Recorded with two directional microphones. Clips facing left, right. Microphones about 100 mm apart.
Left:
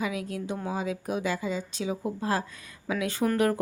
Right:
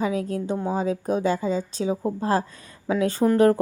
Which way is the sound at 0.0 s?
35° right (ahead or behind).